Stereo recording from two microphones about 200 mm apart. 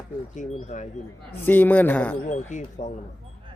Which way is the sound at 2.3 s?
35° left (ahead or behind).